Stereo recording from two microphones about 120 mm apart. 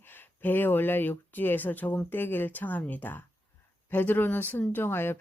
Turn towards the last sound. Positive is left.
turn(degrees=20)  # may be behind; listen again after turning